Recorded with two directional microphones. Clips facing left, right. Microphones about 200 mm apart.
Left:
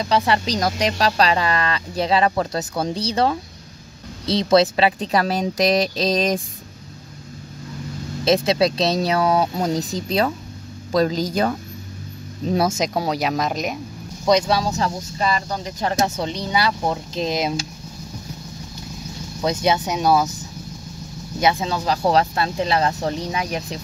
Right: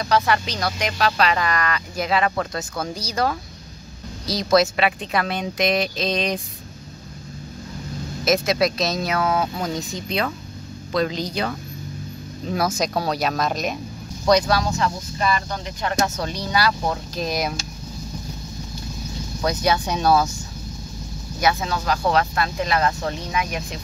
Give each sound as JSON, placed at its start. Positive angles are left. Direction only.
{"t": 0.0, "sound": "speech", "side_deg": 25}
{"t": 0.6, "sound": "speech", "side_deg": 40}
{"t": 8.3, "sound": "speech", "side_deg": 30}
{"t": 12.5, "sound": "speech", "side_deg": 25}
{"t": 16.0, "sound": "speech", "side_deg": 20}
{"t": 19.4, "sound": "speech", "side_deg": 25}
{"t": 21.4, "sound": "speech", "side_deg": 25}